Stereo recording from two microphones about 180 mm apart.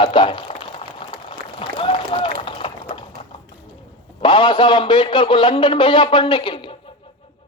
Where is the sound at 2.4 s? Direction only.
30° left (ahead or behind).